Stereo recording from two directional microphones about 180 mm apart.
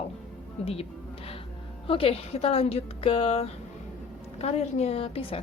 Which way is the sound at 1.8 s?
30° left (ahead or behind).